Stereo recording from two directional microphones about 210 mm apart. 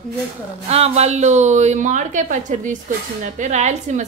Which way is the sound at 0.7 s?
30° right (ahead or behind).